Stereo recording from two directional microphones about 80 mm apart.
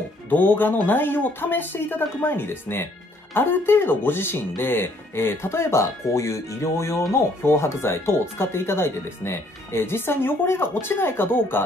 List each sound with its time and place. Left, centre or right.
0.3 s speech: left